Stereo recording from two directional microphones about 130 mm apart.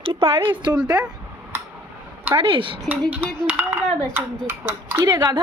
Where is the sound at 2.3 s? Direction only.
40° right (ahead or behind).